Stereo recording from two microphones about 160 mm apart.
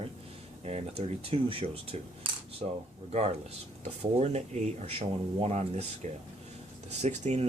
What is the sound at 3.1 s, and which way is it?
Speech, 40° right (ahead or behind).